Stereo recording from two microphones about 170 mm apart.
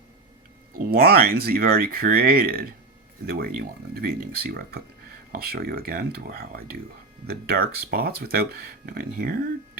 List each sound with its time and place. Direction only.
0.7 s speech: 60° right (ahead or behind)